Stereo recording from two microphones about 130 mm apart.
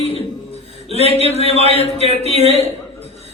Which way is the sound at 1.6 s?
50° left (ahead or behind).